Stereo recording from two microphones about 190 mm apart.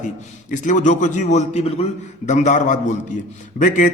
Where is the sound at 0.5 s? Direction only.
40° left (ahead or behind).